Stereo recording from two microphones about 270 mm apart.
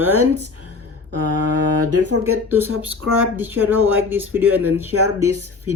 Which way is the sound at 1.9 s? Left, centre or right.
Right.